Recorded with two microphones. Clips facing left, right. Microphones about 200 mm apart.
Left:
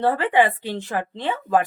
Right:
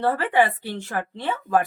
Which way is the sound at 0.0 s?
15° left (ahead or behind).